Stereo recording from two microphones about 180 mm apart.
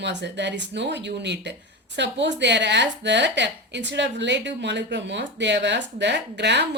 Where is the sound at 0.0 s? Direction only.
75° right (ahead or behind).